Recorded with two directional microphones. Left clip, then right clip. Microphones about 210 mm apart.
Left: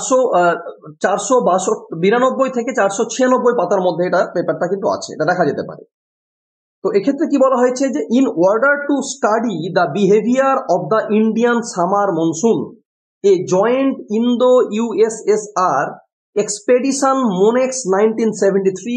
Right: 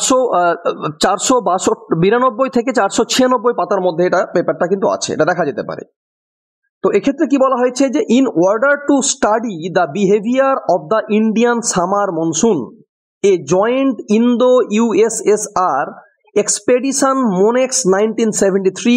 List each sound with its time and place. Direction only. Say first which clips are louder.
0.2 s a man's voice: even; 50° right (ahead or behind)
6.8 s speech: right 2 dB; 30° right (ahead or behind)